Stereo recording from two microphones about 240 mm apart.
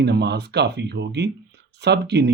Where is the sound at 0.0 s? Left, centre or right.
Right.